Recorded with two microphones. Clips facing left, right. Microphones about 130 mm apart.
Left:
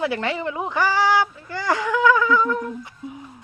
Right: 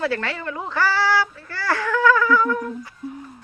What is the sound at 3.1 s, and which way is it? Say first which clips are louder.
Speech: right 4 dB; 10° left (ahead or behind).